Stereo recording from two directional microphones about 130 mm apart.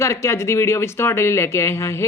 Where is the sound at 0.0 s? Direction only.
20° left (ahead or behind).